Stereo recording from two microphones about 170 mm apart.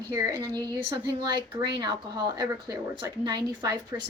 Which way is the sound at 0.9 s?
25° right (ahead or behind).